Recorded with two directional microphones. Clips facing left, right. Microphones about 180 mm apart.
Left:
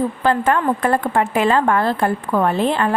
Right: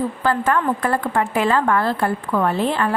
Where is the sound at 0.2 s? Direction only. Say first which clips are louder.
Left 2 dB; 25° left (ahead or behind).